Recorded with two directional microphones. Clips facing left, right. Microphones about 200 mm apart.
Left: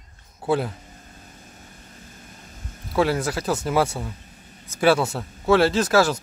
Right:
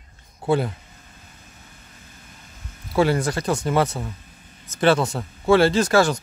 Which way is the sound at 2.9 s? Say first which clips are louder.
Right 2 dB; centre (ahead or behind).